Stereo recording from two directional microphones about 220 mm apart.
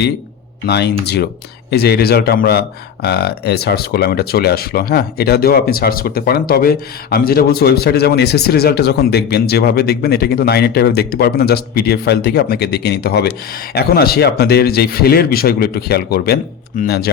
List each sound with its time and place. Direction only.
0.7 s speech: 50° left (ahead or behind)